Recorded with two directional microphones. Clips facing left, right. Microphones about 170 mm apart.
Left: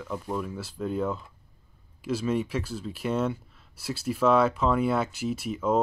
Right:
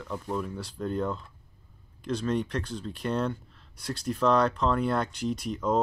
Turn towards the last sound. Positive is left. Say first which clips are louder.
# left 1 dB
turn(degrees=5)  # may be behind; listen again after turning